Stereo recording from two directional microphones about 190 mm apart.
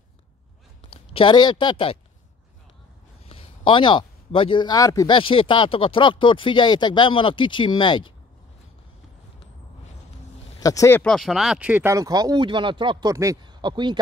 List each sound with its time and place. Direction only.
0.8 s speech: 30° left (ahead or behind)
3.3 s speech: 30° left (ahead or behind)
10.6 s speech: 15° left (ahead or behind); by 13.9 s 25° right (ahead or behind)